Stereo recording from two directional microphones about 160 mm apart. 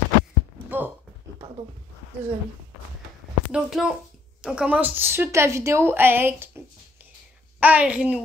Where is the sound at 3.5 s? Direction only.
5° right (ahead or behind).